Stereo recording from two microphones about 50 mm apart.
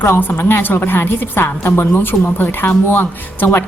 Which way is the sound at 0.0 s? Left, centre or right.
Left.